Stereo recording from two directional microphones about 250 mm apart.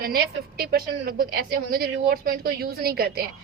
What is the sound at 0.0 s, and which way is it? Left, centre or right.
A woman's voice, right.